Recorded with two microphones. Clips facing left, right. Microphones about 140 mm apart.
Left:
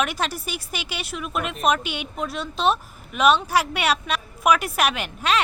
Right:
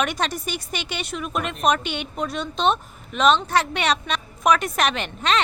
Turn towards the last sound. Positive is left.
turn(degrees=5)  # may be behind; listen again after turning